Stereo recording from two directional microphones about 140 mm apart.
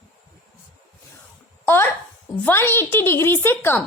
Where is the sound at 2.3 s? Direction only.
10° left (ahead or behind).